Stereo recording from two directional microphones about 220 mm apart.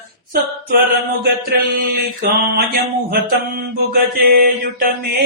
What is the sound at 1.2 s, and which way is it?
Mantra, 40° right (ahead or behind).